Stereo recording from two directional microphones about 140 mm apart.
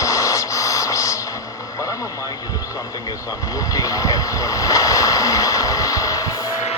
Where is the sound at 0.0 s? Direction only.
25° left (ahead or behind).